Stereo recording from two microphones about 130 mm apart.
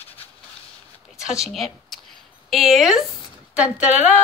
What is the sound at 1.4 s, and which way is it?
Speech, centre (ahead or behind).